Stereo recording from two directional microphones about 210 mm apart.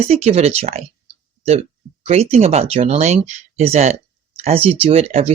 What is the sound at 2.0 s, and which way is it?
Speech, 30° right (ahead or behind).